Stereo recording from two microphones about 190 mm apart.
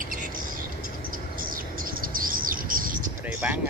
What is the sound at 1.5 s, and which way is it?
Bird, 50° right (ahead or behind).